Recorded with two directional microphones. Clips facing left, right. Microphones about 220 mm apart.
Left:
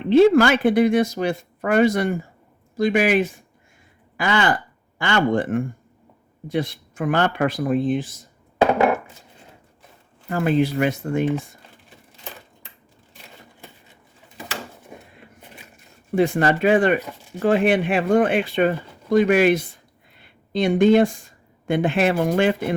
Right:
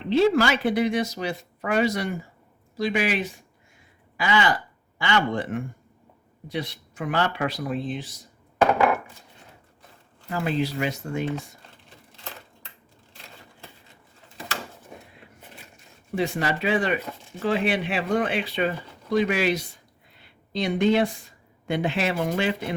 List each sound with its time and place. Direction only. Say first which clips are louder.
0.1 s speech: left 6 dB; 55° left (ahead or behind)
10.2 s speech: left 6 dB; 55° left (ahead or behind)
16.1 s speech: left 7 dB; 50° left (ahead or behind)